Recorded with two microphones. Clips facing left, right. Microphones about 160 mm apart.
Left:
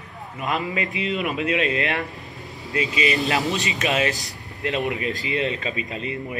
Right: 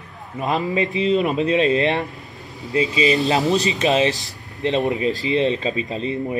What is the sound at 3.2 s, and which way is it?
Speech, 20° right (ahead or behind).